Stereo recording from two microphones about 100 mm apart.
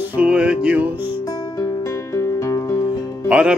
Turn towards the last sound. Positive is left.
turn(degrees=-10)  # may be behind; listen again after turning